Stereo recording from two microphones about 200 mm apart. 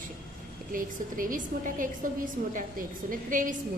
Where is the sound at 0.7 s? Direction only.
45° right (ahead or behind).